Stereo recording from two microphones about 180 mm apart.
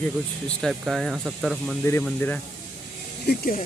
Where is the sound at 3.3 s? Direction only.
50° left (ahead or behind).